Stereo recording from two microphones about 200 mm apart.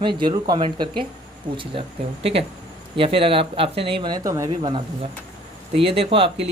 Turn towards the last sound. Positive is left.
turn(degrees=-25)  # may be behind; listen again after turning